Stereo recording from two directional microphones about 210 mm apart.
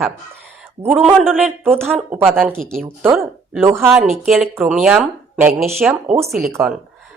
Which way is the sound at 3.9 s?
Centre (ahead or behind).